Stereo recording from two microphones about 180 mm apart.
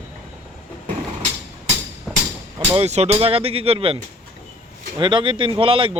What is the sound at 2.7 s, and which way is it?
A man's voice, 35° right (ahead or behind).